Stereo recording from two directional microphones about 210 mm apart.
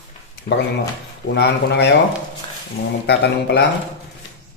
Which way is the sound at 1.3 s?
55° left (ahead or behind).